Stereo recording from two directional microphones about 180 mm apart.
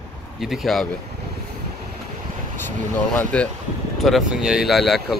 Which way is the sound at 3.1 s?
10° left (ahead or behind).